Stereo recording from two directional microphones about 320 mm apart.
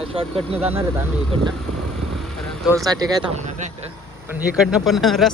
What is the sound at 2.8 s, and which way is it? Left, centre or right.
Speech, centre.